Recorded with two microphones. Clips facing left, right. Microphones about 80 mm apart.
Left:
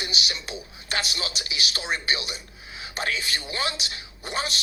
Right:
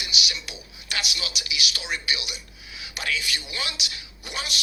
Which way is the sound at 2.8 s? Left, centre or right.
Left.